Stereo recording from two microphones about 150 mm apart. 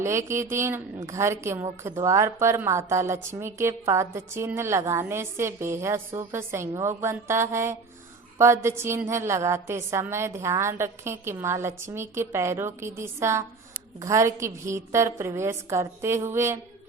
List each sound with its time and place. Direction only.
0.0 s a woman's voice: 20° right (ahead or behind)